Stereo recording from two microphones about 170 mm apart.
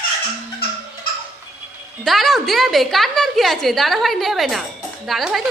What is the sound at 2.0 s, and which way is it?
A woman's voice, centre (ahead or behind).